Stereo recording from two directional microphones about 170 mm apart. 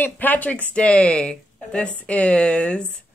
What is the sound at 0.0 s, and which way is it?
Speech, 10° left (ahead or behind).